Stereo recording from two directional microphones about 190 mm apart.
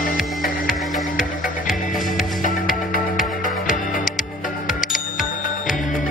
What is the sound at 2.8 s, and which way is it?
Music, 45° left (ahead or behind).